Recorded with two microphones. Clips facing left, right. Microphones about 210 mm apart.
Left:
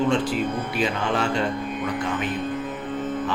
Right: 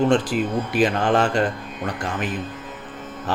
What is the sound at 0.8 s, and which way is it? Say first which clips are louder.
Speech: right 6 dB; 50° right (ahead or behind).